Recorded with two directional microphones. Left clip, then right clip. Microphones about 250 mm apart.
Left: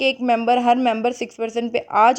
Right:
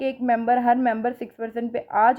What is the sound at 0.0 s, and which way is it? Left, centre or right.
Speech, left.